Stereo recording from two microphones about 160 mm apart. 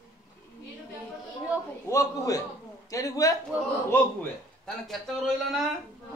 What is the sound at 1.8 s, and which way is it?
A man's voice, 20° left (ahead or behind).